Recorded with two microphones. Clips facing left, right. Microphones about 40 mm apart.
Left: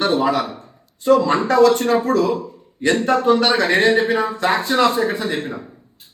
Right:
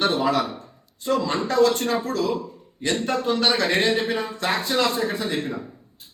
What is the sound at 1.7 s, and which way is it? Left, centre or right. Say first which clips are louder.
Speech: left 7 dB; centre.